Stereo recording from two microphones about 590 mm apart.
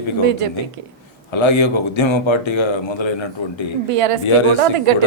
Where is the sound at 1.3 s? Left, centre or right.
Left.